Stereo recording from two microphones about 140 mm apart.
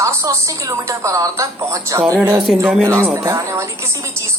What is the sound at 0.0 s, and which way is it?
A woman's voice, 20° right (ahead or behind).